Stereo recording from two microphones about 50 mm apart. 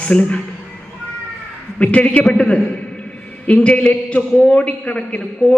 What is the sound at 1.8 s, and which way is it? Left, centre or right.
Speech, left.